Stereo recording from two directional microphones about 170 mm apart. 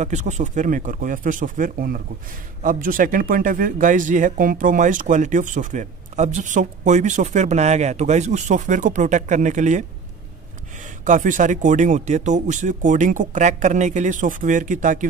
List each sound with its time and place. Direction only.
0.0 s speech: 45° right (ahead or behind)
11.1 s speech: 50° right (ahead or behind)